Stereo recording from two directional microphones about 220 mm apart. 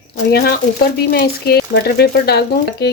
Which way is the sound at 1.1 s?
45° left (ahead or behind).